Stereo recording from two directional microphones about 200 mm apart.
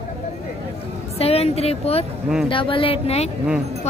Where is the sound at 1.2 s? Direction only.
30° left (ahead or behind).